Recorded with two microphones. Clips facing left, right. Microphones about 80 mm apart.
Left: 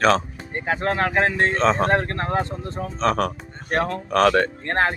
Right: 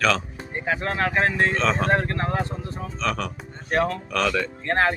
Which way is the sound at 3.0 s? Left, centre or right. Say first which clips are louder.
Left 6 dB; left.